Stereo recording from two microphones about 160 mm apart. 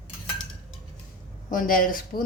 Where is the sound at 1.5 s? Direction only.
60° left (ahead or behind).